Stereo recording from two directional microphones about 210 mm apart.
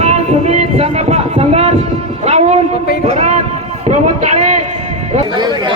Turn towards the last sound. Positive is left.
turn(degrees=-20)  # may be behind; listen again after turning